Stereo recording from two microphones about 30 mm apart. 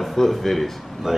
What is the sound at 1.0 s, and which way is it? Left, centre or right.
Speech, centre.